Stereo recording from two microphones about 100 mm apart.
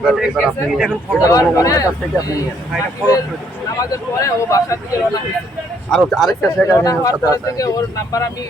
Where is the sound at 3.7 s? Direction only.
35° left (ahead or behind).